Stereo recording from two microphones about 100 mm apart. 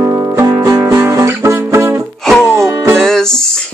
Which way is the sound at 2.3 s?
5° left (ahead or behind).